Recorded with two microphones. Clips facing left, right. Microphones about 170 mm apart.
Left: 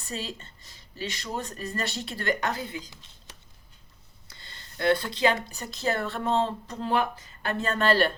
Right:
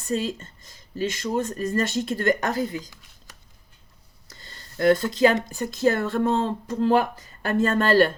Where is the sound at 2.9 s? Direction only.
25° left (ahead or behind).